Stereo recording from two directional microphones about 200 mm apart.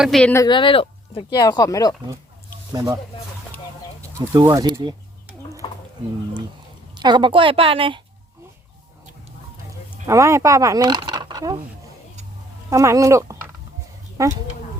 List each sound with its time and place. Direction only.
0.0 s speech: 5° left (ahead or behind)
0.4 s speech: 25° left (ahead or behind)
2.7 s speech: 15° right (ahead or behind)
4.4 s a woman's voice: 20° right (ahead or behind)
5.6 s a sound: 25° left (ahead or behind)
6.9 s a woman's voice: 20° right (ahead or behind)
10.1 s speech: 15° right (ahead or behind)
12.7 s speech: 15° right (ahead or behind)